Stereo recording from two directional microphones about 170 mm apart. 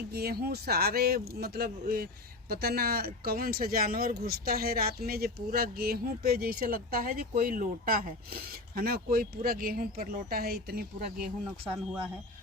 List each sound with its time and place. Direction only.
0.1 s speech: 65° right (ahead or behind)